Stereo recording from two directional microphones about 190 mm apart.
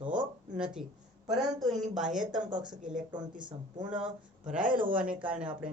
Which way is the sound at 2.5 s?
25° right (ahead or behind).